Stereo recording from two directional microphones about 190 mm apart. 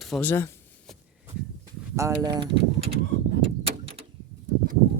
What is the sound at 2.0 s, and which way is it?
Speech, 15° right (ahead or behind).